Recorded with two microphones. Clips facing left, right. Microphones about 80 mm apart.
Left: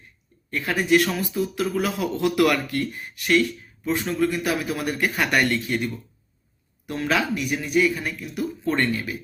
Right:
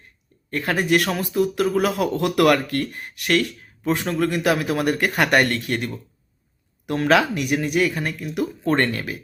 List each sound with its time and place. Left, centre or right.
0.5 s speech: right